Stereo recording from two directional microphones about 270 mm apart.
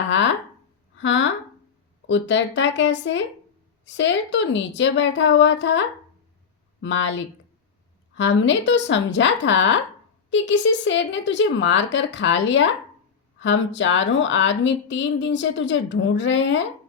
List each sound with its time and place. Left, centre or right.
0.9 s a woman's voice: left
6.8 s a woman's voice: left
8.1 s a woman's voice: left